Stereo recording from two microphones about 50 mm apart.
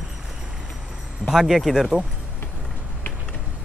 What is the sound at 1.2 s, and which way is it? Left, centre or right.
Speech, centre.